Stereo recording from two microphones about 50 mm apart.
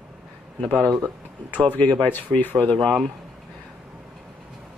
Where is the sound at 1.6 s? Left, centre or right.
Left.